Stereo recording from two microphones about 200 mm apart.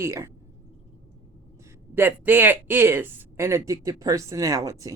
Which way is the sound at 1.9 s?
10° right (ahead or behind).